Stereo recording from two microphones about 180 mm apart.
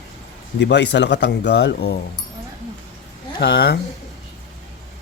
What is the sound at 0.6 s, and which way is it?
Speech, 75° left (ahead or behind).